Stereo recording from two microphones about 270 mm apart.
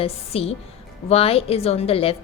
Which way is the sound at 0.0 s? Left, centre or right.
Left.